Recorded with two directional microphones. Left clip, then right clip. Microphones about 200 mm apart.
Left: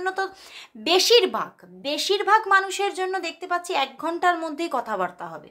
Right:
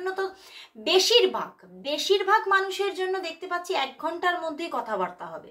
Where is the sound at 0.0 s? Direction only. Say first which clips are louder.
Left 3 dB; 45° left (ahead or behind).